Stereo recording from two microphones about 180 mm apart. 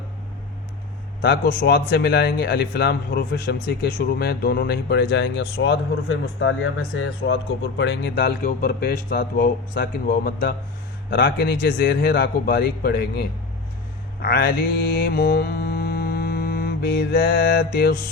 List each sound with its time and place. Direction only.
1.2 s speech: 60° left (ahead or behind)
7.3 s speech: 85° left; by 13.2 s 60° left (ahead or behind)
14.2 s mantra: 60° left (ahead or behind)